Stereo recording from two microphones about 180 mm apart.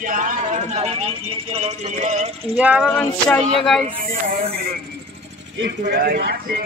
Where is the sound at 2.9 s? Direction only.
5° left (ahead or behind).